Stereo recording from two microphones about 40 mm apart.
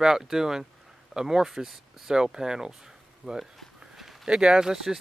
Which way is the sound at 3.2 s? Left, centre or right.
Right.